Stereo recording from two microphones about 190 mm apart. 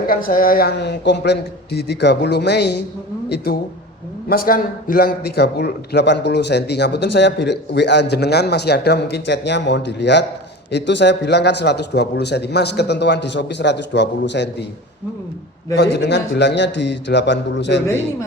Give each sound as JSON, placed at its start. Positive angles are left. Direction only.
{"t": 0.1, "sound": "a man's voice", "side_deg": 45}
{"t": 15.7, "sound": "a man's voice", "side_deg": 60}